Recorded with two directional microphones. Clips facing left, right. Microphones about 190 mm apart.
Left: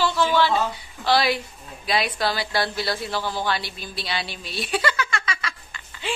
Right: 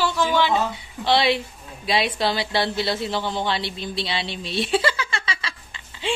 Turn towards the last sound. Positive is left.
turn(degrees=-25)  # may be behind; listen again after turning